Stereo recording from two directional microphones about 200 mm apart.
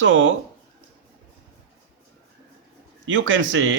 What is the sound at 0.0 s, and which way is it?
Speech, 70° right (ahead or behind).